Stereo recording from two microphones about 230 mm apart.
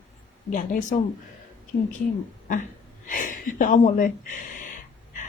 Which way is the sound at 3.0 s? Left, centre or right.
Left.